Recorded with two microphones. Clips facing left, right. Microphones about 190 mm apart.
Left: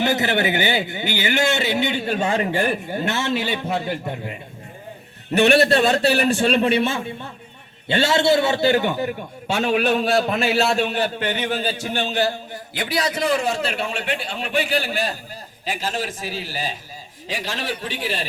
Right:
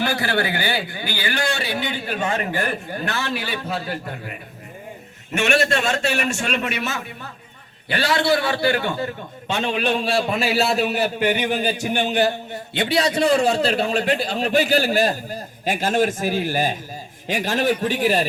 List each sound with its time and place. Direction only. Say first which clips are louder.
0.0 s speech: left 2 dB; 20° left (ahead or behind)
5.3 s a man's voice: left 5 dB; 35° left (ahead or behind); by 18.3 s 45° right (ahead or behind)